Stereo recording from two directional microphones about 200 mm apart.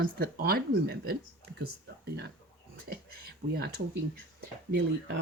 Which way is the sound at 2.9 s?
50° right (ahead or behind).